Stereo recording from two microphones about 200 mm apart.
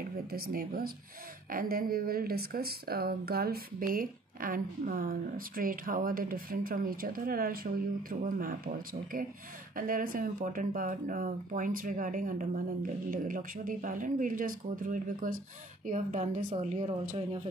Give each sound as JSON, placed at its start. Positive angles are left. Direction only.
{"t": 0.3, "sound": "speech", "side_deg": -50}